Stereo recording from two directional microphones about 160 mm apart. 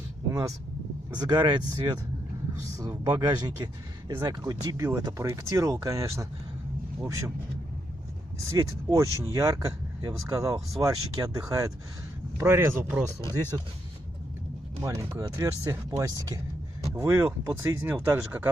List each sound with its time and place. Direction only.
0.3 s speech: 20° right (ahead or behind)
8.4 s speech: 20° right (ahead or behind)
14.8 s speech: 20° right (ahead or behind)